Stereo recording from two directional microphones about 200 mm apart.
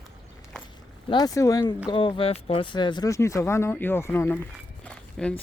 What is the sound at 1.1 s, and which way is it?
Speech, 20° left (ahead or behind).